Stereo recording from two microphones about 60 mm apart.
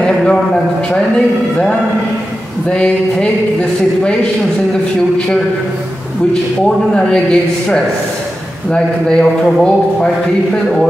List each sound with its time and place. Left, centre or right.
0.1 s speech: centre
6.6 s speech: centre